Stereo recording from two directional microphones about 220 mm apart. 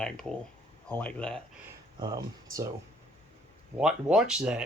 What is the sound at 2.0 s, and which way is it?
Speech, 20° right (ahead or behind).